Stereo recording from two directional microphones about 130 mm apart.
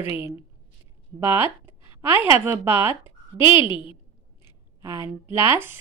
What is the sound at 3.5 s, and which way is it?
Speech, 40° left (ahead or behind).